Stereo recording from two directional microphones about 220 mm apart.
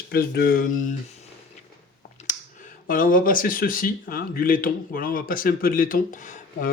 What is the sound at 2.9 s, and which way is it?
Speech, 40° left (ahead or behind).